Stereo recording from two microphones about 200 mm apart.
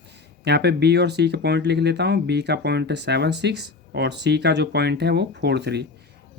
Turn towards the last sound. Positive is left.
turn(degrees=-55)  # may be behind; listen again after turning